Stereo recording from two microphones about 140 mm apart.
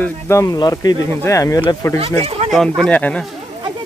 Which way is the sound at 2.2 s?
45° right (ahead or behind).